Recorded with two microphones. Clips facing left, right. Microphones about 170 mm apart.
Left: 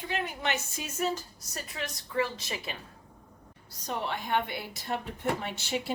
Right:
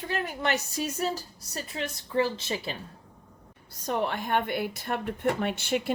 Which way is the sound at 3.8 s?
55° right (ahead or behind).